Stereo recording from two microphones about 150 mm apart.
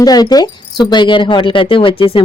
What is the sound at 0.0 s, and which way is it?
Speech, 25° left (ahead or behind).